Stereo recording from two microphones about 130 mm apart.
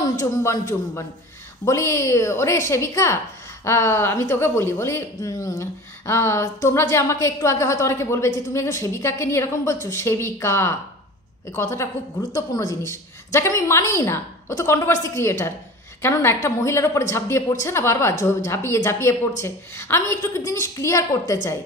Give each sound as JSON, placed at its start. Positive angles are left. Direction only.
{"t": 0.1, "sound": "speech", "side_deg": 25}